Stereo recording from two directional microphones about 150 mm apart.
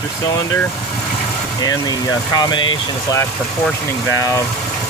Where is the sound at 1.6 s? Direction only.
25° left (ahead or behind).